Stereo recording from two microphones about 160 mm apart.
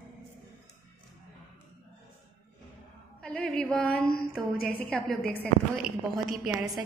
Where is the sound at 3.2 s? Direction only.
5° left (ahead or behind).